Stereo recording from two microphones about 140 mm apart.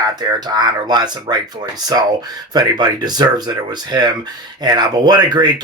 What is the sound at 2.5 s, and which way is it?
Speech, 30° right (ahead or behind).